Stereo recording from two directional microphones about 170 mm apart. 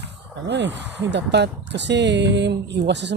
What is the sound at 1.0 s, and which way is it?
Speech, 85° right.